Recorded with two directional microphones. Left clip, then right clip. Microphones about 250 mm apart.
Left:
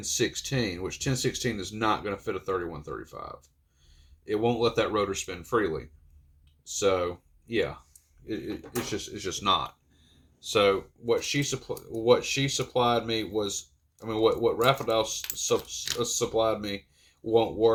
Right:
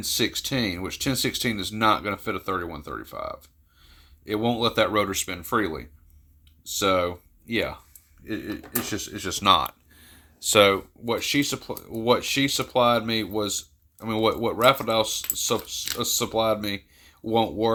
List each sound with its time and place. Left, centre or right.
0.0 s speech: right